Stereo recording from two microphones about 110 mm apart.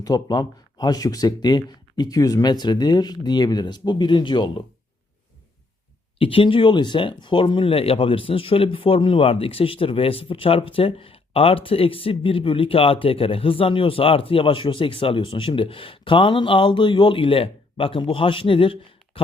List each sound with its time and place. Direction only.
0.0 s speech: 40° left (ahead or behind)
6.1 s speech: 55° left (ahead or behind)